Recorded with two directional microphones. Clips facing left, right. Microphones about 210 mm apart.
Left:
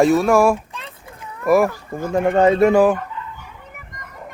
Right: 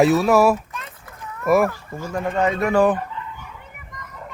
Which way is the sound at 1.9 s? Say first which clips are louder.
Left 5 dB; 15° left (ahead or behind).